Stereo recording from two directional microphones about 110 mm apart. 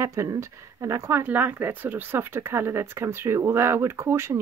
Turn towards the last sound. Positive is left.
turn(degrees=-25)  # may be behind; listen again after turning